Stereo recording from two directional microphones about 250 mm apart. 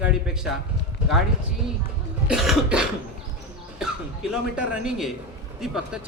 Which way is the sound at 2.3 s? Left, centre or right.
Centre.